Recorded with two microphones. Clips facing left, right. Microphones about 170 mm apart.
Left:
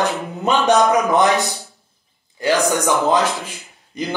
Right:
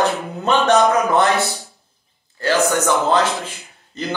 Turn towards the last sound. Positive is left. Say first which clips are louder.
# left 2 dB
turn(degrees=15)  # may be behind; listen again after turning